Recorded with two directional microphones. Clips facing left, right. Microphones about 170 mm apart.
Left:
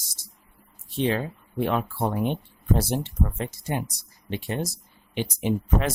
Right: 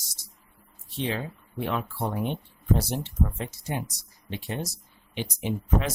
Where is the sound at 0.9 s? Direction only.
55° left (ahead or behind).